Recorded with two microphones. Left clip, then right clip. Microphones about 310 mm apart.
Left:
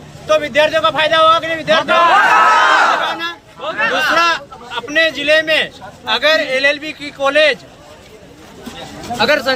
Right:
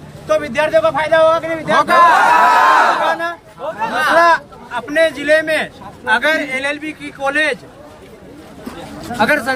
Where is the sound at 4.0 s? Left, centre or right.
Centre.